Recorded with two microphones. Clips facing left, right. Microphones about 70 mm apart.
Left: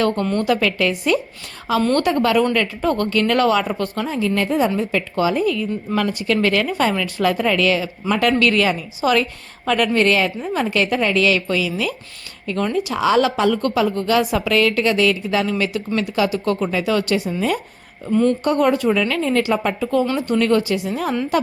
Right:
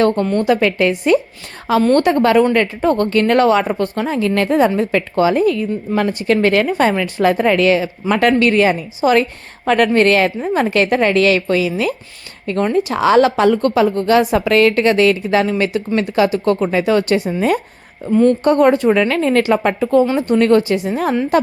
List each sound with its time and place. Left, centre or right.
0.3 s a woman's voice: right
4.1 s a woman's voice: right
8.4 s a woman's voice: right
9.6 s a woman's voice: right